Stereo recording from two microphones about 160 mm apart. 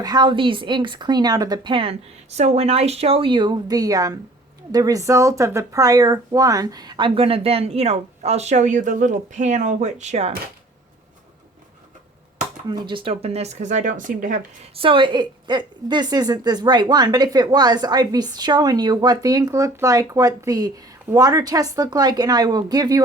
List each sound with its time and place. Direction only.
0.0 s a woman's voice: 25° right (ahead or behind); by 10.3 s 45° right (ahead or behind)
12.6 s speech: 30° right (ahead or behind); by 14.4 s 55° right (ahead or behind)
14.8 s a woman's voice: 35° right (ahead or behind)